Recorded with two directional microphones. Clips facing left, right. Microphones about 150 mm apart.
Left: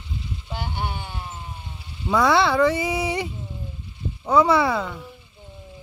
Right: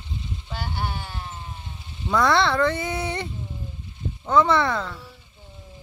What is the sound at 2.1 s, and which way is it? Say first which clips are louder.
Speech: left 2 dB; 5° left (ahead or behind).